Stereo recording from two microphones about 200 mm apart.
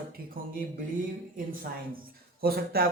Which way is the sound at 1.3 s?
45° right (ahead or behind).